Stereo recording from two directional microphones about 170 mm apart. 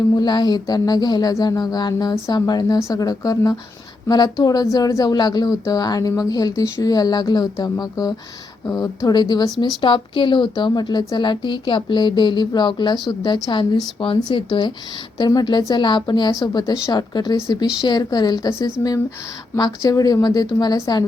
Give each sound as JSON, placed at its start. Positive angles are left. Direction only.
{"t": 0.2, "sound": "speech", "side_deg": 25}